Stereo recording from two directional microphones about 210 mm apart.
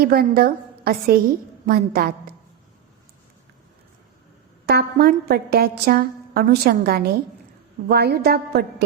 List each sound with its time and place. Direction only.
0.0 s a woman's voice: 45° right (ahead or behind)
4.6 s a woman's voice: 50° right (ahead or behind)